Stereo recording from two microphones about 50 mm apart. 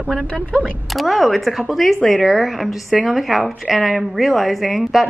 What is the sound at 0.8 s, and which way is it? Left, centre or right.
A woman's voice, centre.